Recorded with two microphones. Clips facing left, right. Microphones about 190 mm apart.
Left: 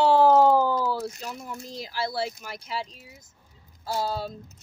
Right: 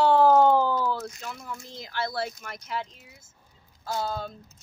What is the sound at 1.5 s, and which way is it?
Speech, 35° left (ahead or behind).